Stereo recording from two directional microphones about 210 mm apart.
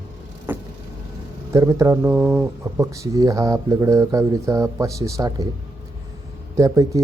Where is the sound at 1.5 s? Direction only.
15° right (ahead or behind).